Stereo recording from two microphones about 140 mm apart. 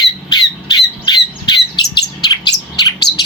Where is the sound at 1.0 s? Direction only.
30° left (ahead or behind).